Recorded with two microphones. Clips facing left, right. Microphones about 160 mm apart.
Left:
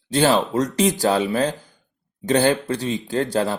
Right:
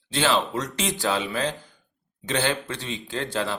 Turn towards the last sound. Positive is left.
turn(degrees=40)  # may be behind; listen again after turning